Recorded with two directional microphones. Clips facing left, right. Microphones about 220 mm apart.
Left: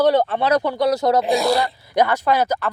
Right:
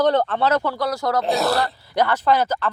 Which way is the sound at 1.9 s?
15° left (ahead or behind).